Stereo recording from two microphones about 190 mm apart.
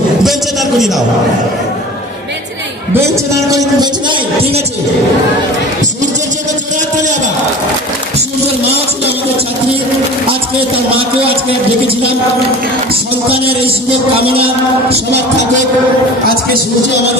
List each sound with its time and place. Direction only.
0.2 s a sound: centre (ahead or behind)
3.4 s a man's voice: 20° right (ahead or behind)
11.0 s a man's voice: 30° right (ahead or behind)
13.3 s a man's voice: 30° right (ahead or behind)